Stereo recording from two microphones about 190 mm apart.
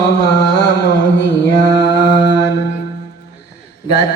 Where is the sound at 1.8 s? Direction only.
65° left (ahead or behind).